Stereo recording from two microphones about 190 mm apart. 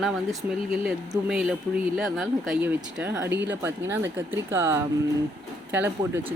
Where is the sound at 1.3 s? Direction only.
5° right (ahead or behind).